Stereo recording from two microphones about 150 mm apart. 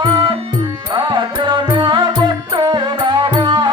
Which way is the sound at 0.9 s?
30° right (ahead or behind).